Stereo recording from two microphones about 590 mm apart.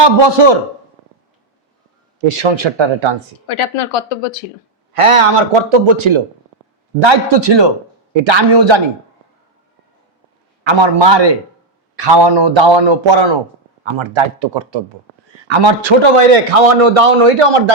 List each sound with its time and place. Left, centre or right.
0.0 s a man's voice: right
2.3 s a man's voice: right
3.4 s speech: left
4.9 s a man's voice: right
10.6 s a man's voice: right